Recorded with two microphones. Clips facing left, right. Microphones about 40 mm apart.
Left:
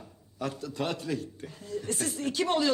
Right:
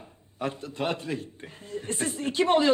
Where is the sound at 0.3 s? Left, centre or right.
Right.